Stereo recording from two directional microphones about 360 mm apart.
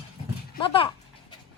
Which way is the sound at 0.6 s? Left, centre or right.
Centre.